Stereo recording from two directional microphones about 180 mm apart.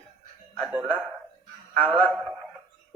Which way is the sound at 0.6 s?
5° right (ahead or behind).